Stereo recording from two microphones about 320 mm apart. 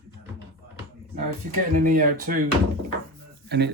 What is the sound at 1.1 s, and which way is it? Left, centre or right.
Speech, right.